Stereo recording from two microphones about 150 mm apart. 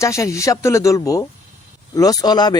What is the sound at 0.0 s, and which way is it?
Speech, 20° left (ahead or behind).